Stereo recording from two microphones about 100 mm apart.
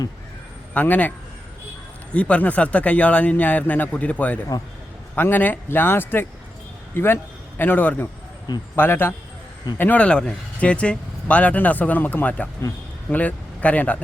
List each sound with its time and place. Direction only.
0.7 s speech: 15° left (ahead or behind)
2.1 s a man's voice: 15° left (ahead or behind)